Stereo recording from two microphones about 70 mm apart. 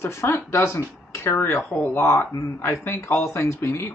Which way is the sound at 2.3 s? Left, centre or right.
Left.